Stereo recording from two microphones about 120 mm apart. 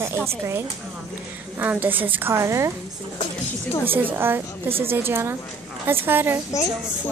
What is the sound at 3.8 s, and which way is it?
A woman's voice, 15° right (ahead or behind).